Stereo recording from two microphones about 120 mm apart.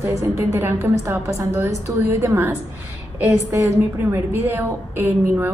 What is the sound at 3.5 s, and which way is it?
A woman's voice, 20° right (ahead or behind).